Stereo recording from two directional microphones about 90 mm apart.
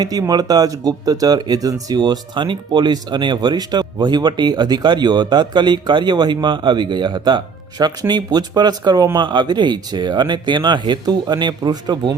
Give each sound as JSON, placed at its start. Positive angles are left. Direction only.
{"t": 0.0, "sound": "speech", "side_deg": -45}
{"t": 9.1, "sound": "speech", "side_deg": -60}